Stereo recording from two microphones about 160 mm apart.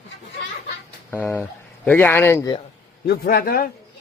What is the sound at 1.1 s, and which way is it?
Speech, 10° left (ahead or behind).